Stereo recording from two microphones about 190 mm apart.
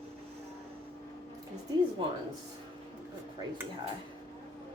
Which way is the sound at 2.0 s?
30° right (ahead or behind).